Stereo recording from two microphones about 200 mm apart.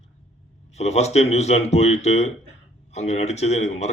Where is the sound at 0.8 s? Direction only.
35° left (ahead or behind).